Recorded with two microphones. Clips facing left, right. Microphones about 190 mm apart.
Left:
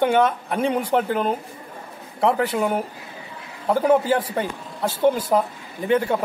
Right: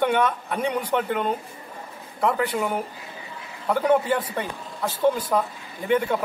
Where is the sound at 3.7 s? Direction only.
30° left (ahead or behind).